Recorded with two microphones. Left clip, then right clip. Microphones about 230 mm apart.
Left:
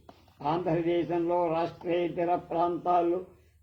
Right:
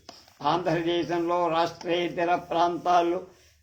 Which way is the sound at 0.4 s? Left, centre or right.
Right.